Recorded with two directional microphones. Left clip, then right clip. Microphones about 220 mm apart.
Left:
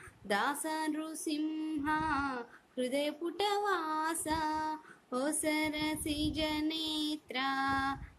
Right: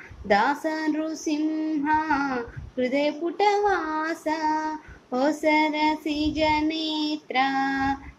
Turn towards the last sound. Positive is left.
turn(degrees=15)  # may be behind; listen again after turning